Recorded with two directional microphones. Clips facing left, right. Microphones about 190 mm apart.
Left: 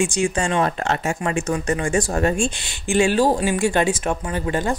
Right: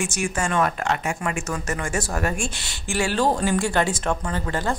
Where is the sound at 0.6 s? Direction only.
30° left (ahead or behind).